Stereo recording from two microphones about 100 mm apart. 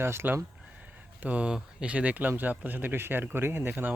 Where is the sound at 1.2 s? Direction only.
10° right (ahead or behind).